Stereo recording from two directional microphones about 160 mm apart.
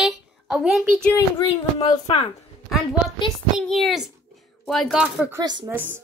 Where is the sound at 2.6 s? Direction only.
Centre (ahead or behind).